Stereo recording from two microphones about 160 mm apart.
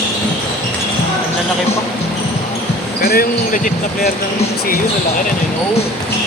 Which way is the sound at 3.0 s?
70° left (ahead or behind).